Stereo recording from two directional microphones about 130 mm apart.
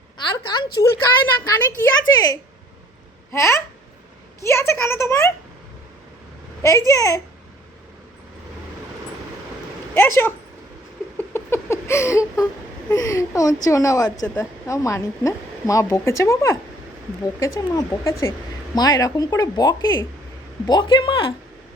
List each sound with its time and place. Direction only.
0.2 s a woman's voice: 35° left (ahead or behind)
6.6 s a woman's voice: 25° left (ahead or behind)
9.9 s speech: 20° left (ahead or behind)
11.2 s a sound: 20° left (ahead or behind)
12.9 s a woman's voice: 25° left (ahead or behind); by 21.3 s 40° left (ahead or behind)